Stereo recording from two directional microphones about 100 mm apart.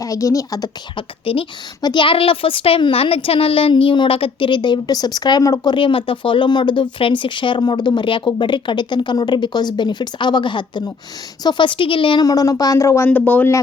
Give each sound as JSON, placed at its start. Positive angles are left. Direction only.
{"t": 0.0, "sound": "a woman's voice", "side_deg": 35}
{"t": 0.9, "sound": "a woman's voice", "side_deg": 65}
{"t": 1.8, "sound": "a woman's voice", "side_deg": 50}
{"t": 5.7, "sound": "a woman's voice", "side_deg": 60}
{"t": 12.2, "sound": "a woman's voice", "side_deg": 40}
{"t": 13.1, "sound": "speech", "side_deg": 15}